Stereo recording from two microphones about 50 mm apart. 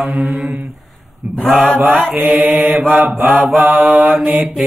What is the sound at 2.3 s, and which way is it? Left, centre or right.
Mantra, right.